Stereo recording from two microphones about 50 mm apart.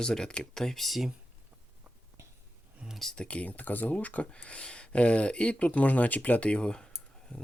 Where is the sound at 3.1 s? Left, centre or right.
Left.